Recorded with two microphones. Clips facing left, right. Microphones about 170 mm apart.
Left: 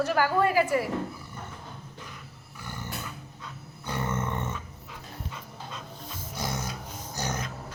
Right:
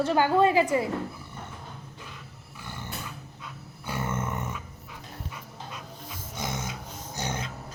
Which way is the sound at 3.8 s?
10° right (ahead or behind).